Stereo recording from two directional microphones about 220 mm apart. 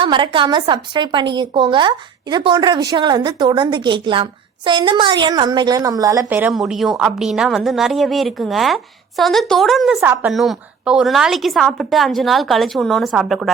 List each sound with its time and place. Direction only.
0.0 s a woman's voice: 20° right (ahead or behind); by 10.0 s centre (ahead or behind)
10.0 s a woman's voice: 10° right (ahead or behind)